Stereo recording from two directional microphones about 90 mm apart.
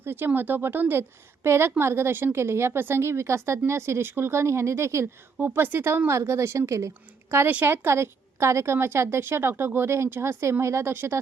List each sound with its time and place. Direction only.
0.0 s a woman's voice: 25° right (ahead or behind)
5.5 s a woman's voice: 20° right (ahead or behind)